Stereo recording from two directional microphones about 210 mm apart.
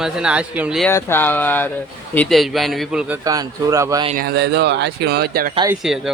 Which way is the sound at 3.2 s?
15° right (ahead or behind).